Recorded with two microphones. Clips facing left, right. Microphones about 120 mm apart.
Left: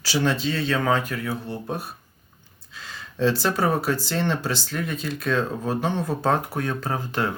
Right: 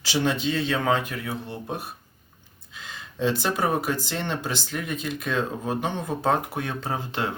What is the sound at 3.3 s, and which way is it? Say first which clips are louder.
Speech: left 2 dB; 15° right (ahead or behind).